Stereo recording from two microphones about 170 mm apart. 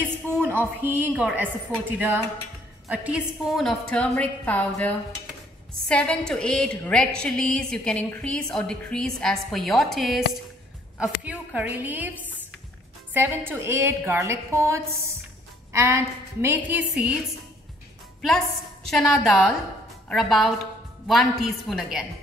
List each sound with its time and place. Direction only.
0.5 s a woman's voice: 10° right (ahead or behind)
11.2 s a woman's voice: 10° right (ahead or behind)
13.1 s a woman's voice: 15° right (ahead or behind)
18.9 s a woman's voice: centre (ahead or behind)